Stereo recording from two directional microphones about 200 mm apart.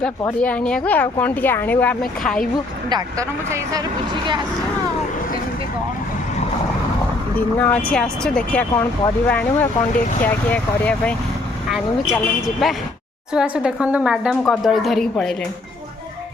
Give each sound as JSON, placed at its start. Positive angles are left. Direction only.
{"t": 0.0, "sound": "speech", "side_deg": 5}
{"t": 2.9, "sound": "speech", "side_deg": -15}
{"t": 7.3, "sound": "speech", "side_deg": 10}
{"t": 8.7, "sound": "speech", "side_deg": 20}
{"t": 9.2, "sound": "speech", "side_deg": 5}